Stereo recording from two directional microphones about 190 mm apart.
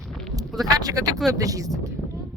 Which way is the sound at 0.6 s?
20° right (ahead or behind).